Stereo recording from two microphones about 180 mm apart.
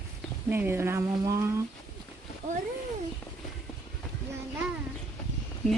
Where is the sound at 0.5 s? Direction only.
10° right (ahead or behind).